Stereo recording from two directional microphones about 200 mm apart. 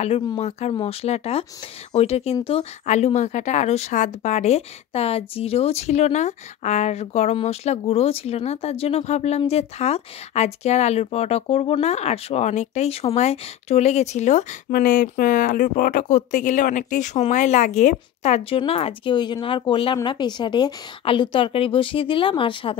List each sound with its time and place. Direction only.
0.4 s speech: 30° left (ahead or behind)